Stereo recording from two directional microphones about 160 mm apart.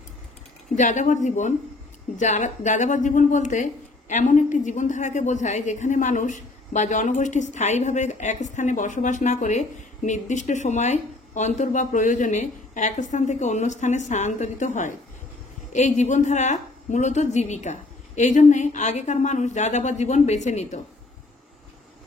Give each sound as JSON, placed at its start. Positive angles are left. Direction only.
{"t": 0.7, "sound": "a man's voice", "side_deg": 50}